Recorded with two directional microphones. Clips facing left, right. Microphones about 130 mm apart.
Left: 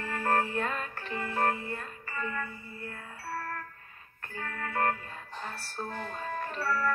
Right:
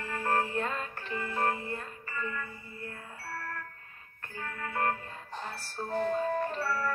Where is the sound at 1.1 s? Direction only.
35° left (ahead or behind).